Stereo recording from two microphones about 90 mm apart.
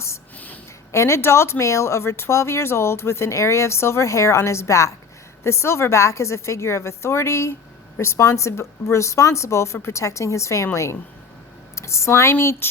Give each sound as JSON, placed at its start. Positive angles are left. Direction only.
{"t": 0.9, "sound": "speech", "side_deg": 30}
{"t": 11.7, "sound": "speech", "side_deg": 30}